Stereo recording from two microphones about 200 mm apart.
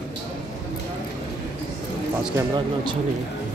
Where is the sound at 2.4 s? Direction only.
20° right (ahead or behind).